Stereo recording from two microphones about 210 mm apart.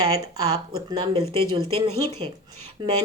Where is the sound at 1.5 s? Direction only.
20° right (ahead or behind).